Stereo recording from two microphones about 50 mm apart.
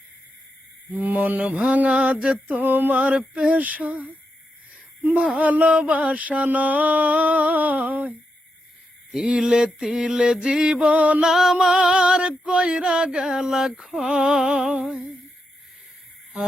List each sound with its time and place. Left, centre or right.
0.9 s mantra: right
2.5 s mantra: right
5.4 s mantra: right
9.1 s a sound: centre
10.8 s mantra: right
11.2 s a sound: centre